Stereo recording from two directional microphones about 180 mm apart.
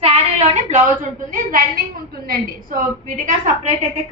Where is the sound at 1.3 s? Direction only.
50° right (ahead or behind).